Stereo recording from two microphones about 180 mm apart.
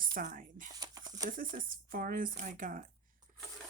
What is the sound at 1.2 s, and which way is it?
Speech, 50° right (ahead or behind).